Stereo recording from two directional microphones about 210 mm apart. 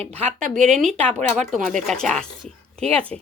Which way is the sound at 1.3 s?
Centre (ahead or behind).